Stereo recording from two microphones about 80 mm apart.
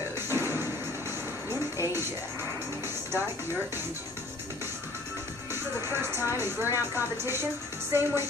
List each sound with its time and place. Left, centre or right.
0.3 s music: right
5.5 s speech: right